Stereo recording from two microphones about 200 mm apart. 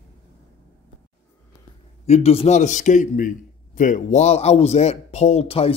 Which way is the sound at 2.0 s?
30° left (ahead or behind).